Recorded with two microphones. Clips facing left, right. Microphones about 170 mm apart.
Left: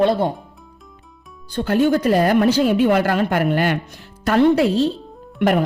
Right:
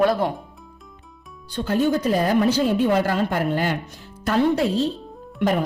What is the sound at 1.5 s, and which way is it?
A woman's voice, 65° left (ahead or behind).